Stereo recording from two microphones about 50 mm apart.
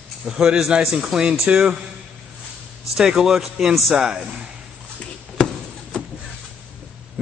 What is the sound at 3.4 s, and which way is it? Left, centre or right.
Speech, centre.